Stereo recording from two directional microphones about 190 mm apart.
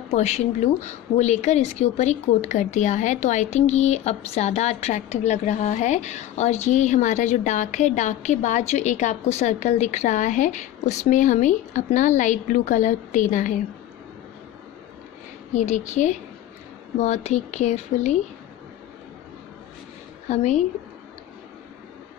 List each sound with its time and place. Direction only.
0.1 s a woman's voice: 35° left (ahead or behind)
15.5 s a woman's voice: 40° left (ahead or behind)
20.2 s a woman's voice: 35° left (ahead or behind)